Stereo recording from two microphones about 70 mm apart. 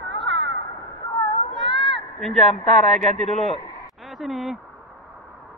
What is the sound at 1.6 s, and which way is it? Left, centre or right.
Speech, centre.